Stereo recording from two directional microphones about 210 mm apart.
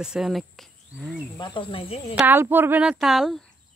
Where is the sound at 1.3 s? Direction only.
20° left (ahead or behind).